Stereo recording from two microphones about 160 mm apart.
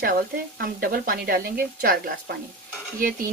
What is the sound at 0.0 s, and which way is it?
Speech, 70° right (ahead or behind).